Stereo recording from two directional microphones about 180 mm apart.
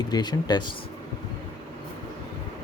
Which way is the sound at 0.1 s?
25° left (ahead or behind).